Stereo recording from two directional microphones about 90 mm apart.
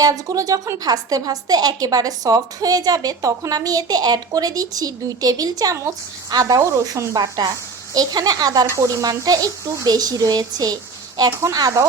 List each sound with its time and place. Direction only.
0.0 s a woman's voice: 40° right (ahead or behind)